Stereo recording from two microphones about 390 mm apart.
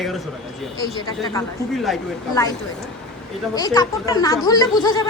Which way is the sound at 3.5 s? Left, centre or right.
Centre.